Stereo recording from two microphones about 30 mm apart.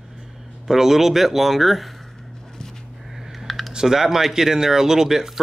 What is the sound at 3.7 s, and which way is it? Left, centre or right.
Speech, centre.